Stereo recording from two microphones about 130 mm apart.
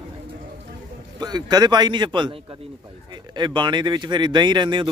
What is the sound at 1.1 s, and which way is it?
Speech, 30° right (ahead or behind).